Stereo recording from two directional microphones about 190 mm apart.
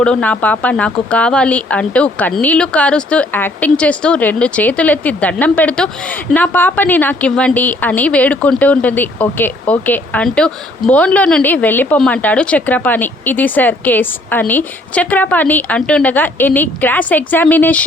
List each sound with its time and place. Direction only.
0.0 s speech: 5° left (ahead or behind)